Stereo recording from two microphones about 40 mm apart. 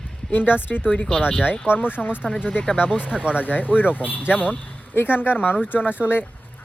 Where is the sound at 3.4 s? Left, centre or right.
Left.